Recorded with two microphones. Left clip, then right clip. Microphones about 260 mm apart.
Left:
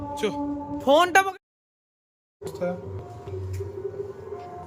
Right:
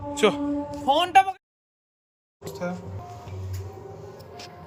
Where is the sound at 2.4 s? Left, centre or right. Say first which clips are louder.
Left 3 dB; centre.